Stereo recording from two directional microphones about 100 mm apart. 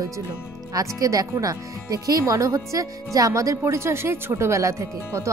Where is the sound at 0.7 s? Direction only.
35° right (ahead or behind).